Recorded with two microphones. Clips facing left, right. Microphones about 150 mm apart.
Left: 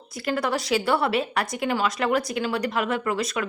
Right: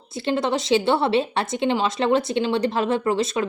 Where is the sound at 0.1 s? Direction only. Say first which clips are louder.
Right 3 dB; 25° right (ahead or behind).